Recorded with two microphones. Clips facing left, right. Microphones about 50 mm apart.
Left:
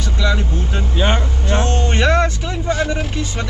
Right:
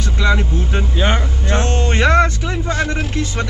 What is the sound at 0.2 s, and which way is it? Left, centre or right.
Speech, right.